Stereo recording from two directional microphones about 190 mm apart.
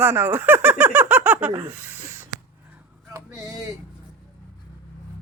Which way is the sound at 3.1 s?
15° right (ahead or behind).